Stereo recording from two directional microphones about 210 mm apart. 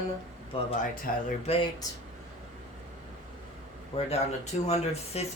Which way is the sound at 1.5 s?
30° left (ahead or behind).